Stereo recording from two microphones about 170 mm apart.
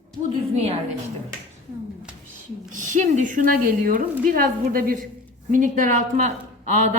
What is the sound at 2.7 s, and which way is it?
A woman's voice, 50° right (ahead or behind).